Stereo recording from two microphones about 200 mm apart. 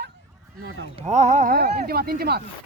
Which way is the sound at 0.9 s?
35° right (ahead or behind).